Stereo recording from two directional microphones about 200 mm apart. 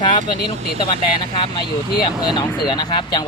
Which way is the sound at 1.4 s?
20° left (ahead or behind).